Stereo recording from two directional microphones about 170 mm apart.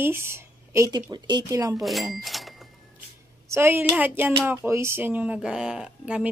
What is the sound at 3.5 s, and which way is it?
Speech, 10° right (ahead or behind).